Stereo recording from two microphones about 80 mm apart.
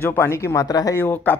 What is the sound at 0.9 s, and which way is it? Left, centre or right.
Speech, left.